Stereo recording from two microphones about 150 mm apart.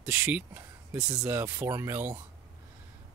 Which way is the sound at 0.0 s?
10° right (ahead or behind).